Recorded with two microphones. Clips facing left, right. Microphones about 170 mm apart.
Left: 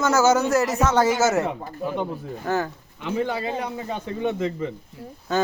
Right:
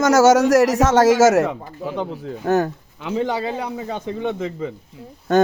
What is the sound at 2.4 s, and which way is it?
Speech, 45° right (ahead or behind).